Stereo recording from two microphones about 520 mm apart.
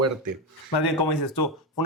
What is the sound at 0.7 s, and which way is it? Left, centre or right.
Speech, left.